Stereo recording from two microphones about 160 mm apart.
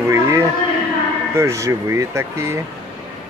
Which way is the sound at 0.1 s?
20° right (ahead or behind).